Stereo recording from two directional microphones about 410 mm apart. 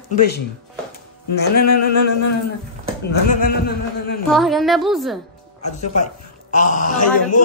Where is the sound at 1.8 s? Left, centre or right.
Left.